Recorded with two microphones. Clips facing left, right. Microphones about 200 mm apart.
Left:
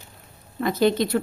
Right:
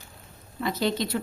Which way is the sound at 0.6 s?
50° left (ahead or behind).